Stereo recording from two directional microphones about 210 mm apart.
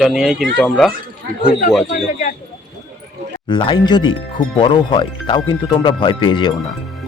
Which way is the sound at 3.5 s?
25° left (ahead or behind).